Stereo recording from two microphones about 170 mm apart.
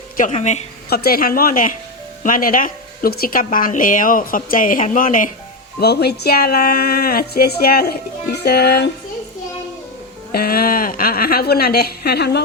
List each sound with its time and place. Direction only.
0.2 s a woman's voice: 45° left (ahead or behind)
0.9 s a woman's voice: 65° left (ahead or behind)
5.8 s speech: 70° left (ahead or behind)
10.3 s a woman's voice: 60° left (ahead or behind)